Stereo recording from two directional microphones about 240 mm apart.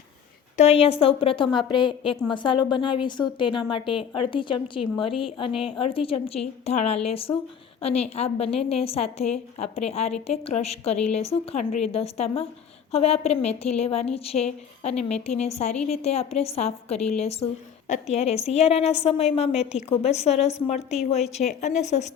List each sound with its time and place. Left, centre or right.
0.5 s a woman's voice: left